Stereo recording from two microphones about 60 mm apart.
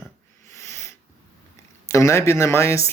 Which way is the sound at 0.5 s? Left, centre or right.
Left.